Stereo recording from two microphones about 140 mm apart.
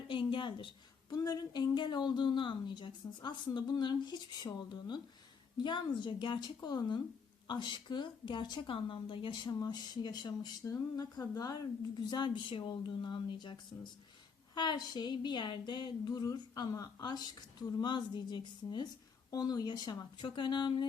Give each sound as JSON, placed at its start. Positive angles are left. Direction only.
{"t": 0.1, "sound": "speech", "side_deg": 35}